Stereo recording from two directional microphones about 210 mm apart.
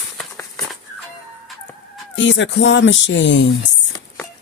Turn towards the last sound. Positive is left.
turn(degrees=60)  # may be behind; listen again after turning